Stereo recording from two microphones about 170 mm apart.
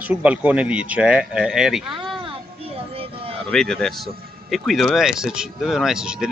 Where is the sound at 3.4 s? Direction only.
5° left (ahead or behind).